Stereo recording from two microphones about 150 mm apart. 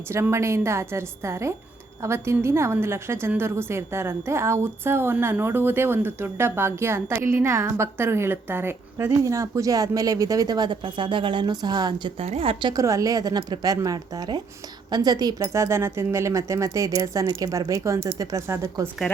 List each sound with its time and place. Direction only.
0.1 s a woman's voice: 20° right (ahead or behind)
12.2 s speech: 40° right (ahead or behind); by 18.9 s 15° right (ahead or behind)